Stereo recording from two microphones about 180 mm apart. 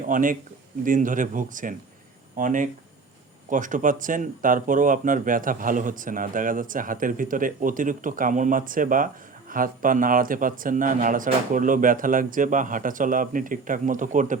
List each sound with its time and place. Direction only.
0.0 s speech: 50° right (ahead or behind)